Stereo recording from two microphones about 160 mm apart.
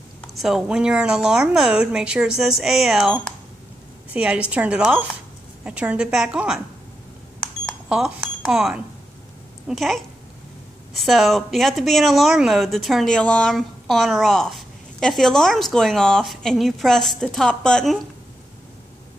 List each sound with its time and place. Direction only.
0.3 s a woman's voice: centre (ahead or behind)
7.6 s cash register: 5° right (ahead or behind)
9.7 s speech: centre (ahead or behind)